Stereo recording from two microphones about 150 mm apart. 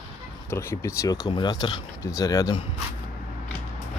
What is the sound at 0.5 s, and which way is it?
Speech, 20° left (ahead or behind).